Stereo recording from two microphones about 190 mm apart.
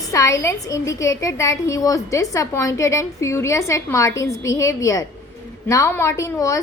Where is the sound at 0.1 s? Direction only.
15° left (ahead or behind).